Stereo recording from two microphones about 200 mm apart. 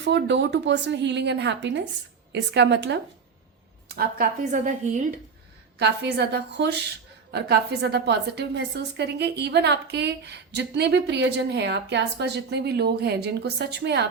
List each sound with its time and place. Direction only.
0.0 s a woman's voice: 60° right (ahead or behind)
3.9 s a woman's voice: 45° right (ahead or behind)
5.8 s a woman's voice: 55° right (ahead or behind)